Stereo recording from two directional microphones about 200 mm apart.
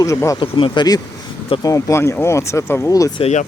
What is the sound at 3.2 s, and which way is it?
Speech, 35° left (ahead or behind).